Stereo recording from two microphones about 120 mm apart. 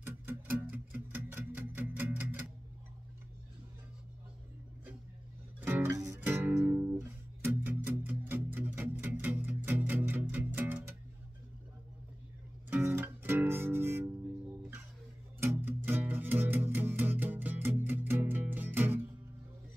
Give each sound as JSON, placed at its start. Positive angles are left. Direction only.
{"t": 0.0, "sound": "music", "side_deg": -15}
{"t": 5.6, "sound": "music", "side_deg": -20}
{"t": 12.6, "sound": "music", "side_deg": -15}
{"t": 15.4, "sound": "music", "side_deg": -20}